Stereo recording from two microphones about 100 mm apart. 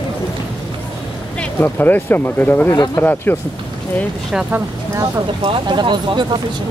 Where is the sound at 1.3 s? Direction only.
20° left (ahead or behind).